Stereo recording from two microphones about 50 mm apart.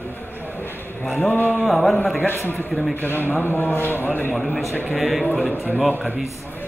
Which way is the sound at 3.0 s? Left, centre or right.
Left.